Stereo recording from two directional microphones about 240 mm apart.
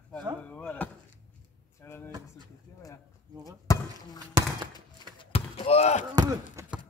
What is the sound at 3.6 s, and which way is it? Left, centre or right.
Basketball bounce, centre.